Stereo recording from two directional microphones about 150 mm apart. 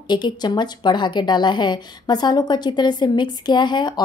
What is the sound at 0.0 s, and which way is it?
A woman's voice, 30° left (ahead or behind).